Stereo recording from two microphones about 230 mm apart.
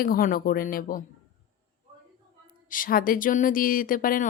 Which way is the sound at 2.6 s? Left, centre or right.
Left.